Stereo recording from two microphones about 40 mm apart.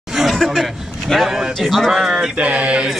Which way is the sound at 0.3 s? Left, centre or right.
Centre.